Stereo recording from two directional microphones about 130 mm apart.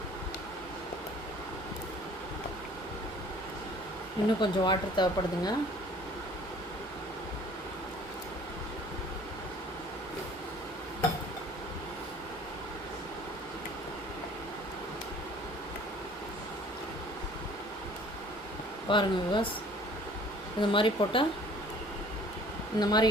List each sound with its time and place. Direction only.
4.4 s speech: 35° left (ahead or behind)
18.9 s speech: 40° left (ahead or behind)
20.6 s speech: 40° left (ahead or behind)
22.8 s speech: 30° left (ahead or behind)